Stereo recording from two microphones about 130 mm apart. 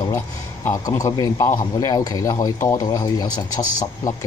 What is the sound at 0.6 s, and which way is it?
Speech, 20° left (ahead or behind).